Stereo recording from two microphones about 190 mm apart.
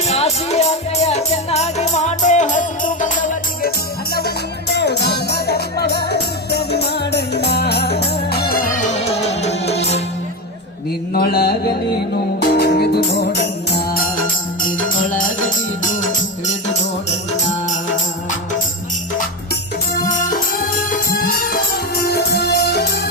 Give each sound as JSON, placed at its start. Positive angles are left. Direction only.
{"t": 0.1, "sound": "music", "side_deg": 35}
{"t": 4.7, "sound": "music", "side_deg": 60}
{"t": 11.1, "sound": "mantra", "side_deg": 55}
{"t": 12.4, "sound": "music", "side_deg": 55}
{"t": 20.0, "sound": "music", "side_deg": 45}